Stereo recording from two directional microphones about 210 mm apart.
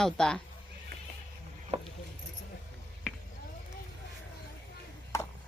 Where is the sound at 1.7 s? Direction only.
30° right (ahead or behind).